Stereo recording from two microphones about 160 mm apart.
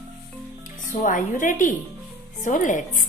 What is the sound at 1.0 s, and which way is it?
A woman's voice, 55° left (ahead or behind).